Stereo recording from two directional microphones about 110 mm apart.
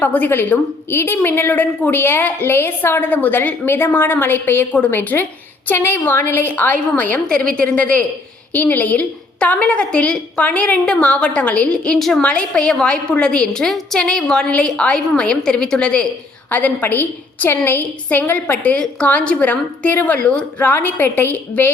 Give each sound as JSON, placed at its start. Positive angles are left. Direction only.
{"t": 0.0, "sound": "a woman's voice", "side_deg": 15}